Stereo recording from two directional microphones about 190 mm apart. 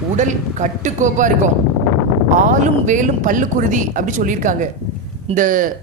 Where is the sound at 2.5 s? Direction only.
40° right (ahead or behind).